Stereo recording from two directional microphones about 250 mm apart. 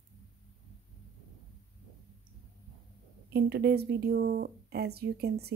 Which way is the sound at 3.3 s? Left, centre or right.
Right.